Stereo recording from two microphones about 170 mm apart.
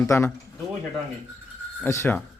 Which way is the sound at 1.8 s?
15° left (ahead or behind).